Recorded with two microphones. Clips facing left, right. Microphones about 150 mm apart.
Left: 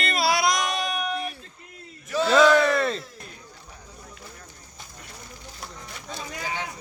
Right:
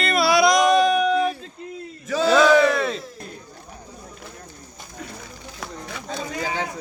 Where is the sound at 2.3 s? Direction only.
Centre (ahead or behind).